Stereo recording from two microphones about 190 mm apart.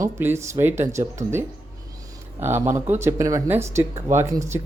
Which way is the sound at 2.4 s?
10° right (ahead or behind).